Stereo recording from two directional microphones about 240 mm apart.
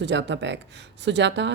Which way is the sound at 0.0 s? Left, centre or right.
Right.